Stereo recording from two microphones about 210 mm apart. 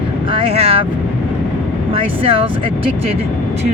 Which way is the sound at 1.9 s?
25° right (ahead or behind).